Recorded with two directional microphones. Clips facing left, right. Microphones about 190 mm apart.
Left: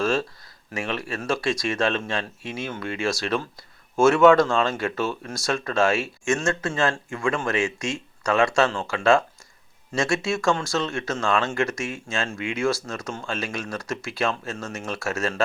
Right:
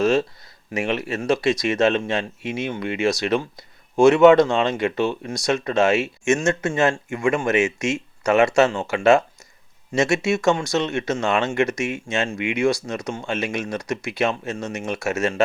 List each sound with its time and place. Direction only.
0.0 s speech: 20° right (ahead or behind)